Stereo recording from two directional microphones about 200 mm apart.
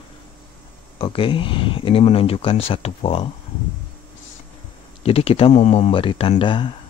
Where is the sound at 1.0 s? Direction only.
25° left (ahead or behind).